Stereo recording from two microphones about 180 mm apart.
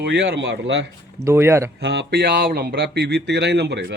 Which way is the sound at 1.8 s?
70° right (ahead or behind).